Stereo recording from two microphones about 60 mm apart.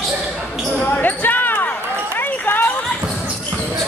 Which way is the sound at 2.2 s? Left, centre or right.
Left.